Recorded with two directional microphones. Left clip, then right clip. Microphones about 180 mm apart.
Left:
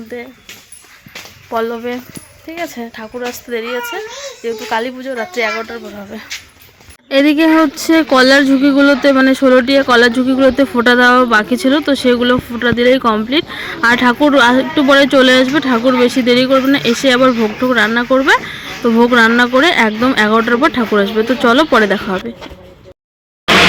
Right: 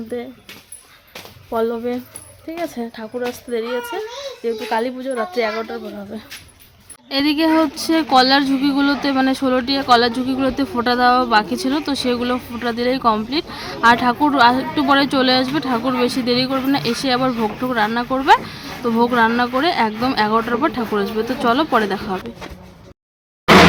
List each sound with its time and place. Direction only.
0.1 s speech: 5° right (ahead or behind)
1.5 s speech: centre (ahead or behind)
7.1 s speech: 20° left (ahead or behind)